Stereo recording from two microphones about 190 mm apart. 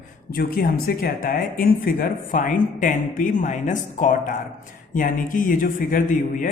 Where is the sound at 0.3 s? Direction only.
50° left (ahead or behind).